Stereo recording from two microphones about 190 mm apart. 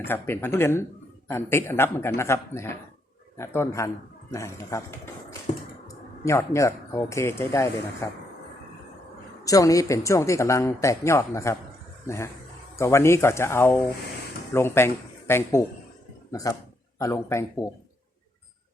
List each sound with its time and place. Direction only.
0.0 s a woman's voice: 10° left (ahead or behind)
9.4 s a woman's voice: 20° left (ahead or behind)